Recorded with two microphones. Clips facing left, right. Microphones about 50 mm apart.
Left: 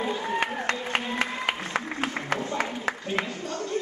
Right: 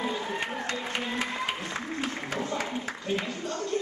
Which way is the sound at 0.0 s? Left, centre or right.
Centre.